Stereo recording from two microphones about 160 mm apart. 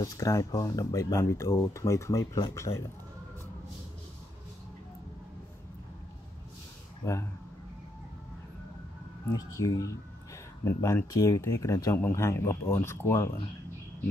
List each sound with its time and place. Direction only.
0.0 s speech: 20° left (ahead or behind)
7.0 s speech: 15° left (ahead or behind)
9.6 s speech: 20° left (ahead or behind)